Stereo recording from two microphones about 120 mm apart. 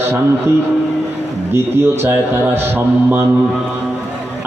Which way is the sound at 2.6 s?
15° right (ahead or behind).